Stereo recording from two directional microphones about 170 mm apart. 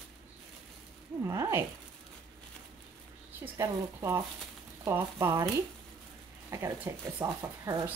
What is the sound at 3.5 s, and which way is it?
A woman's voice, 20° right (ahead or behind).